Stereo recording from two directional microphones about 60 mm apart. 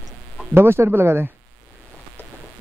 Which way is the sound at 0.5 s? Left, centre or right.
Right.